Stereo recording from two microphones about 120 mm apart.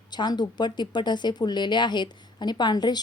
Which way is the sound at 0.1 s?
35° left (ahead or behind).